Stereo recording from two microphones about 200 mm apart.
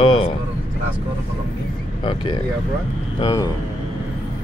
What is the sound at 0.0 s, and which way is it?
Speech, 25° left (ahead or behind).